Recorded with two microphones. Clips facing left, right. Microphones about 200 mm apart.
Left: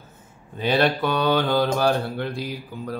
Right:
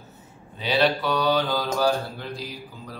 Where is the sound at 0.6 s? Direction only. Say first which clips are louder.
Left 2 dB; 50° left (ahead or behind).